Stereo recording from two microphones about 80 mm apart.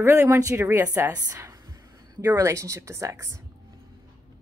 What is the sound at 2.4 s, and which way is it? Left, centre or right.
A woman's voice, right.